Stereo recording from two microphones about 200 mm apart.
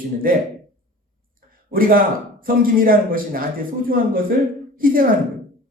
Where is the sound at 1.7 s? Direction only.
45° right (ahead or behind).